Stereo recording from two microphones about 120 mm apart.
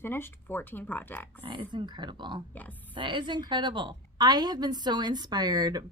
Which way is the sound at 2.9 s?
45° right (ahead or behind).